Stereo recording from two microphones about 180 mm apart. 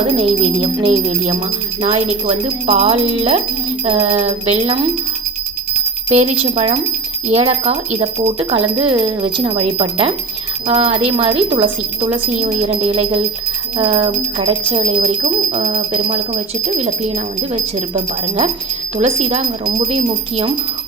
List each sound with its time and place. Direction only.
0.2 s speech: 30° right (ahead or behind)
6.1 s speech: 40° right (ahead or behind)